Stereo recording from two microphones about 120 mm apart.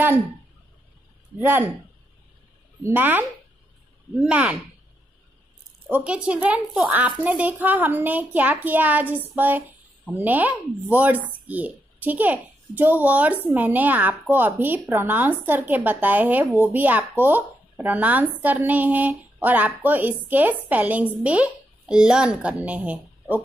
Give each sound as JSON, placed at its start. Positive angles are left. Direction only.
{"t": 2.8, "sound": "speech", "side_deg": -15}
{"t": 5.9, "sound": "speech", "side_deg": -10}